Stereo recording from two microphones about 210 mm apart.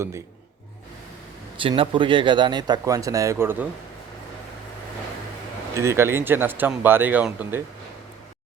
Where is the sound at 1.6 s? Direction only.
25° right (ahead or behind).